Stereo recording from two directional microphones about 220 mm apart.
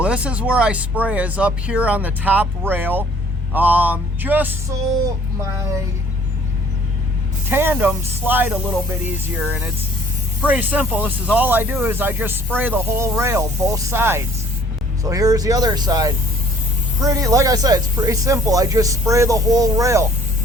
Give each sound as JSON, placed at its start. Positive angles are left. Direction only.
{"t": 0.0, "sound": "speech", "side_deg": -5}
{"t": 7.5, "sound": "speech", "side_deg": -10}